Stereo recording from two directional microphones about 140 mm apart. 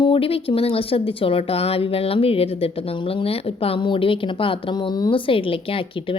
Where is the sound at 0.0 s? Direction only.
40° left (ahead or behind).